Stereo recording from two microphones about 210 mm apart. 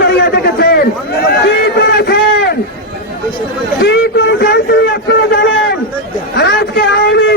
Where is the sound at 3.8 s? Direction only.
55° left (ahead or behind).